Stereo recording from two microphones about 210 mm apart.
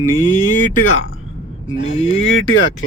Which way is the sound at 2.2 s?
65° left (ahead or behind).